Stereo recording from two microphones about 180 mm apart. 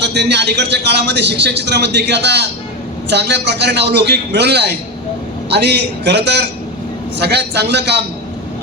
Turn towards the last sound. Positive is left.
turn(degrees=-70)  # may be behind; listen again after turning